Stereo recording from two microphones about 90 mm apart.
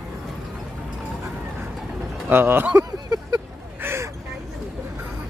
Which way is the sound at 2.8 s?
45° right (ahead or behind).